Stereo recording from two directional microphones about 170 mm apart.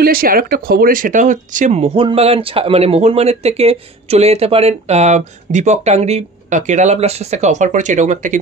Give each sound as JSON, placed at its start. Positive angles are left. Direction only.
{"t": 0.0, "sound": "speech", "side_deg": -60}